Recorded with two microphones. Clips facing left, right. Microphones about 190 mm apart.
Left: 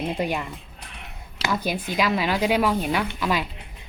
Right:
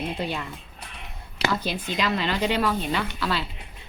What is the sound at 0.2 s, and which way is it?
Speech, 10° left (ahead or behind).